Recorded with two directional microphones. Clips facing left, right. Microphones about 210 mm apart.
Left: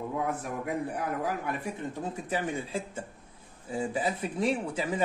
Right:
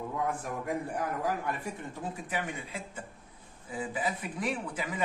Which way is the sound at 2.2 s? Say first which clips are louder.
Left 7 dB; 30° left (ahead or behind).